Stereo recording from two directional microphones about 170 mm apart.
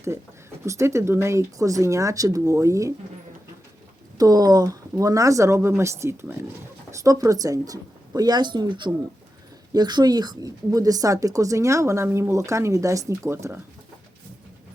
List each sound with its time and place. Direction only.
0.6 s speech: 15° right (ahead or behind)
4.2 s speech: 20° right (ahead or behind)